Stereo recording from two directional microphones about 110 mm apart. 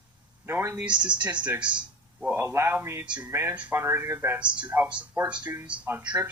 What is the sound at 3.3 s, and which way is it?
Speech, 25° right (ahead or behind).